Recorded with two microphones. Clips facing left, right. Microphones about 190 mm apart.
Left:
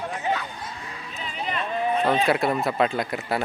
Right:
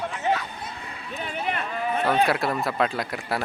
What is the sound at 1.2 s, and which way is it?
Run, 60° right (ahead or behind).